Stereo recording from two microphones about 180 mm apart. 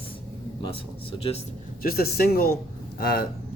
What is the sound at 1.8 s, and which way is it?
Speech, 55° left (ahead or behind).